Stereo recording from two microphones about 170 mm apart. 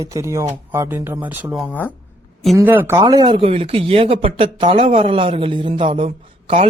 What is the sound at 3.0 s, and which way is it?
A man's voice, 25° right (ahead or behind).